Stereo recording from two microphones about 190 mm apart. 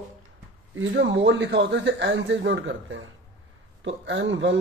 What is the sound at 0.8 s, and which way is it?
A man's voice, 70° right (ahead or behind).